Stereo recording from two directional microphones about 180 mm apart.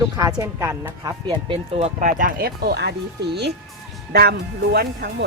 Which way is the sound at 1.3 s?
30° right (ahead or behind).